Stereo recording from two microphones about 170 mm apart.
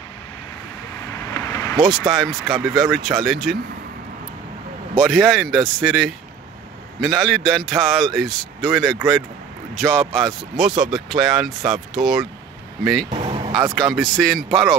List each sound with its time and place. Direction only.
1.1 s vehicle: 15° left (ahead or behind)
1.8 s a man's voice: centre (ahead or behind)
4.9 s a man's voice: 5° left (ahead or behind)
13.2 s a sound: 35° right (ahead or behind)
13.7 s a man's voice: centre (ahead or behind)